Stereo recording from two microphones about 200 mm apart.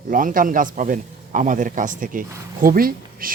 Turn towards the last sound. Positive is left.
turn(degrees=-45)  # may be behind; listen again after turning